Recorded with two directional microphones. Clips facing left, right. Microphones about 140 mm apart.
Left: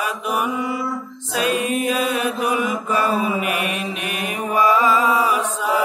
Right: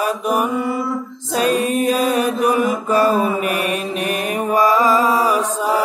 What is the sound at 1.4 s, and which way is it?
Chant, 40° right (ahead or behind).